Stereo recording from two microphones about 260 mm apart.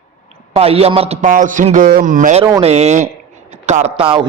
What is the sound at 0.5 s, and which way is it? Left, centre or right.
A man's voice, right.